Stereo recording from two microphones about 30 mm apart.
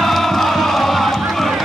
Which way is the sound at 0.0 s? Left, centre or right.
Centre.